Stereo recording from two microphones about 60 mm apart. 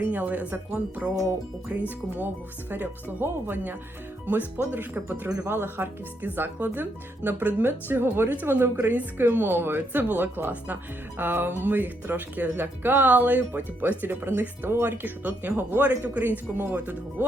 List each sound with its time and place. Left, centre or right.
0.0 s speech: right
16.0 s speech: right